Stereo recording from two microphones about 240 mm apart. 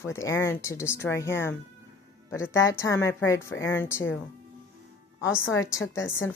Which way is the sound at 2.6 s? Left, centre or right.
Centre.